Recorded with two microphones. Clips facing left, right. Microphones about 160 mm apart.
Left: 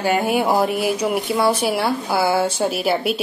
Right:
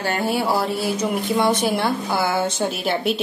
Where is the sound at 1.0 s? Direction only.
5° left (ahead or behind).